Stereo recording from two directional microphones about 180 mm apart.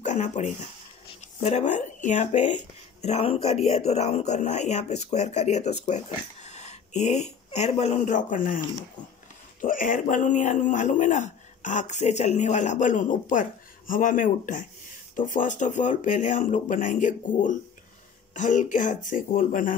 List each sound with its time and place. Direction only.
0.0 s speech: 40° left (ahead or behind)